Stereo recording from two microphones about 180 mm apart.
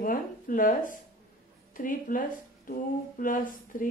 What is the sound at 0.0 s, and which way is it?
Speech, 50° left (ahead or behind).